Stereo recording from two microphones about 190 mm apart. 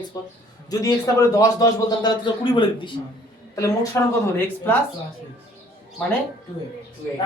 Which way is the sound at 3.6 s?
15° left (ahead or behind).